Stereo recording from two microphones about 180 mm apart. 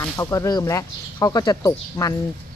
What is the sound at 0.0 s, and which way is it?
Speech, 15° left (ahead or behind).